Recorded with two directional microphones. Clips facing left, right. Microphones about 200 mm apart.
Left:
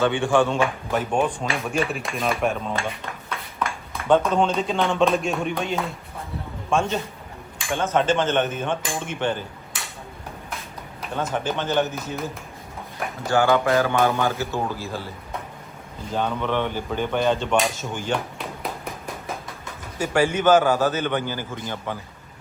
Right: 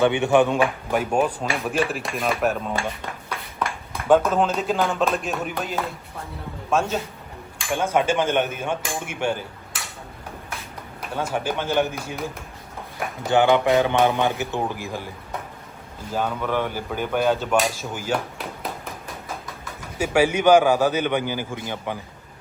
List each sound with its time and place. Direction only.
0.0 s speech: 20° right (ahead or behind); by 2.7 s 5° right (ahead or behind)
4.1 s speech: 5° right (ahead or behind)
11.1 s speech: 10° right (ahead or behind)
13.2 s speech: 20° right (ahead or behind)
16.1 s speech: 5° right (ahead or behind)
20.0 s speech: 10° right (ahead or behind)